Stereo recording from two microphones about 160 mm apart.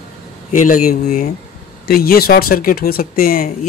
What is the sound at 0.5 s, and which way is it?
Speech, 55° left (ahead or behind).